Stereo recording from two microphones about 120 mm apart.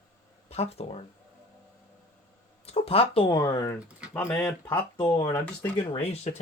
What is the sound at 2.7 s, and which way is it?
Speech, 55° left (ahead or behind).